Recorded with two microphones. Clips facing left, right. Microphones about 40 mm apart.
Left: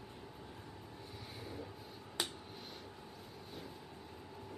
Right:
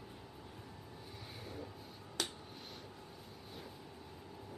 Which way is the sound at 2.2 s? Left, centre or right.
Centre.